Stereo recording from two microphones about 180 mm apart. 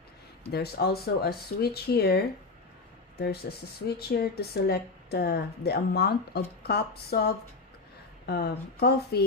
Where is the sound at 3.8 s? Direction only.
60° left (ahead or behind).